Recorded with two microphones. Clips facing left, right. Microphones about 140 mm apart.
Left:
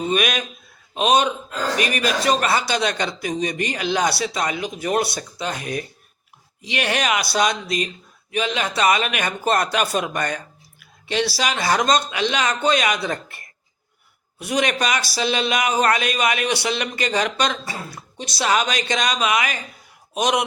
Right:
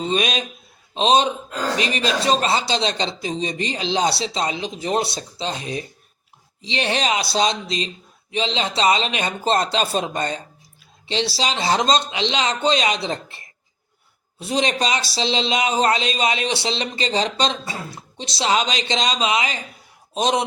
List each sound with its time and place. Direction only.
0.0 s speech: 25° right (ahead or behind)